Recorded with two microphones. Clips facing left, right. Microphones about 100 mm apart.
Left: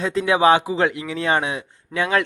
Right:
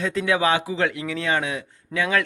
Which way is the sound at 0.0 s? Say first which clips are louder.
Left 4 dB; 30° left (ahead or behind).